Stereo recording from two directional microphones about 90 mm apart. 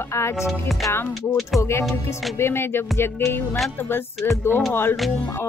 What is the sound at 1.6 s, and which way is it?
Speech, 30° left (ahead or behind).